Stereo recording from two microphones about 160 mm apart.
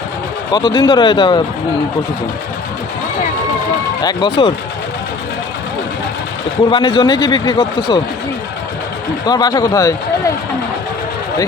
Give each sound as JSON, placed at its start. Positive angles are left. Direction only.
{"t": 0.5, "sound": "a man's voice", "side_deg": 30}
{"t": 4.0, "sound": "speech", "side_deg": 30}
{"t": 6.7, "sound": "a man's voice", "side_deg": 30}
{"t": 9.2, "sound": "a man's voice", "side_deg": 25}